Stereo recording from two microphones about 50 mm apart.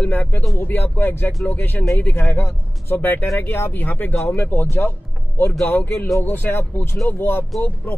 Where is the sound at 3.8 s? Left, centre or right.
Left.